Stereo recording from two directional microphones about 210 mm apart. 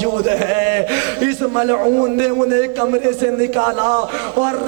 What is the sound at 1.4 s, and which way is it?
A man's voice, 20° right (ahead or behind).